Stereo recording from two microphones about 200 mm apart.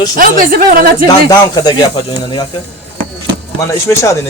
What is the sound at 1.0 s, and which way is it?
Speech, 20° left (ahead or behind).